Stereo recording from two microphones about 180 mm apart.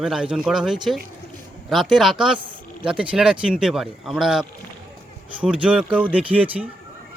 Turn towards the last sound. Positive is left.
turn(degrees=-10)  # may be behind; listen again after turning